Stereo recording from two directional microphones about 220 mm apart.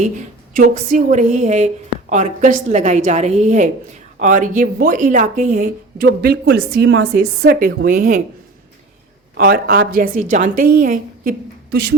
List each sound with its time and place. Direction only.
0.5 s a woman's voice: 35° right (ahead or behind); by 7.1 s 55° right (ahead or behind)
7.1 s a woman's voice: 45° right (ahead or behind)
9.4 s a woman's voice: 45° right (ahead or behind)